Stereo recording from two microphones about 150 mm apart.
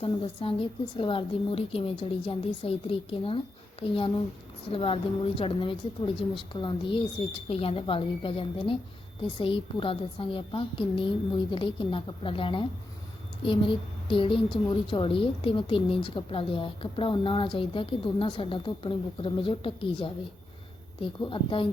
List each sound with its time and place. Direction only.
0.0 s a woman's voice: 35° left (ahead or behind)